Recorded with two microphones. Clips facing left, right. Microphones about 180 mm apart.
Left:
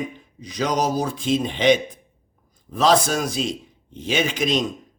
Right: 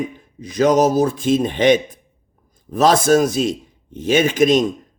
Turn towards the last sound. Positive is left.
turn(degrees=-50)  # may be behind; listen again after turning